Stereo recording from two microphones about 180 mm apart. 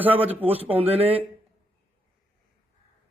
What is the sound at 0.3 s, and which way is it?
Speech, 10° right (ahead or behind).